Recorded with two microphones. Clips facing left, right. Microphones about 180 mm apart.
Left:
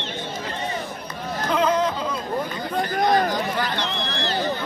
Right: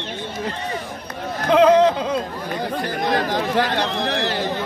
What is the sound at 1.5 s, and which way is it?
Speech, 70° right (ahead or behind).